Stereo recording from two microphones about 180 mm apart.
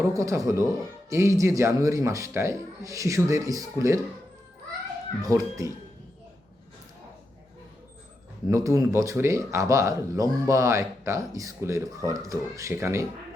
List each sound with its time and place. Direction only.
0.0 s speech: 20° right (ahead or behind)
5.2 s speech: 15° right (ahead or behind)
8.4 s speech: 15° right (ahead or behind)